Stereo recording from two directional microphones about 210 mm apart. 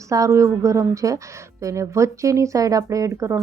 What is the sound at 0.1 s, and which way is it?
Speech, 15° right (ahead or behind).